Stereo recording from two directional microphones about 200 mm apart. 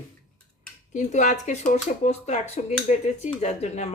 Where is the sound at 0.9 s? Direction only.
40° left (ahead or behind).